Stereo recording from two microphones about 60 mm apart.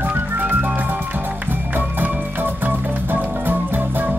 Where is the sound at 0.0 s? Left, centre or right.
Right.